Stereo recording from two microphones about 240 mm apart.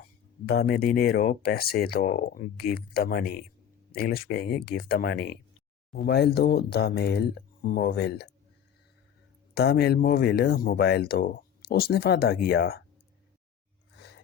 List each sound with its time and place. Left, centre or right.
0.4 s speech: left
9.6 s speech: left